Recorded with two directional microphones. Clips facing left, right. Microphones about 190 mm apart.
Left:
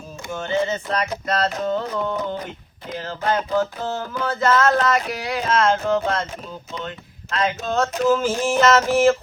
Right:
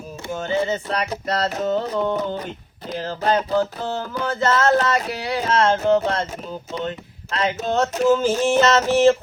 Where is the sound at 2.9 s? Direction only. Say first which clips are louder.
Right 2 dB; 35° right (ahead or behind).